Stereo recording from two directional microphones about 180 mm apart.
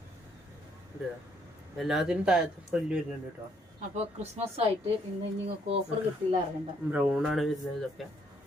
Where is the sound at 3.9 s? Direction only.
40° right (ahead or behind).